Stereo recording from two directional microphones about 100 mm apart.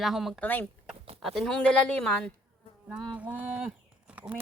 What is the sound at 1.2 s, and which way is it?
Speech, 5° left (ahead or behind).